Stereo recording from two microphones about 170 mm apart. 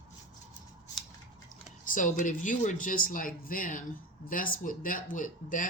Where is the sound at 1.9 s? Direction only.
50° left (ahead or behind).